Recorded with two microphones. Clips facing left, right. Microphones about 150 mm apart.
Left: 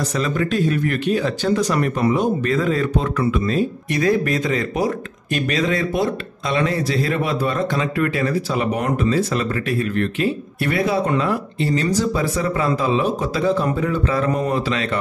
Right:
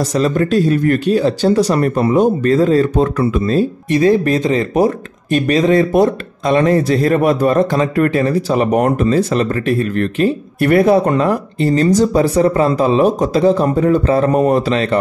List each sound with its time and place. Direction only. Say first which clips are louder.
0.1 s speech: right 9 dB; 40° right (ahead or behind)
4.7 s speech: right 7 dB; 40° right (ahead or behind)